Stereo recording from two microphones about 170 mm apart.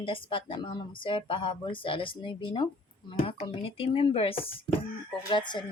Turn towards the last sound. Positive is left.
turn(degrees=25)  # may be behind; listen again after turning